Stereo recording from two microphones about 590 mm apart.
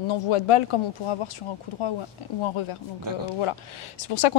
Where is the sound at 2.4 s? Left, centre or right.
Left.